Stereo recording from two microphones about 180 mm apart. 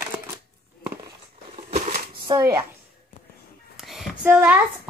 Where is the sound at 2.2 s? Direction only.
20° right (ahead or behind).